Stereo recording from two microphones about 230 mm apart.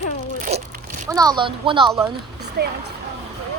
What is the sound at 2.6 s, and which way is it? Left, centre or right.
Speech, right.